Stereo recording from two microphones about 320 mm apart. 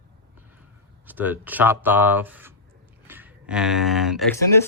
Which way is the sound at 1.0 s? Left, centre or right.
Centre.